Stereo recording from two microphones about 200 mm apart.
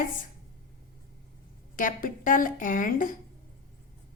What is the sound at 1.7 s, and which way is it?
Speech, 40° left (ahead or behind).